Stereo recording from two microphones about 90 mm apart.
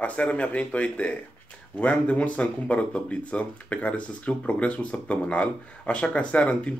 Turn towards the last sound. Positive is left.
turn(degrees=15)  # may be behind; listen again after turning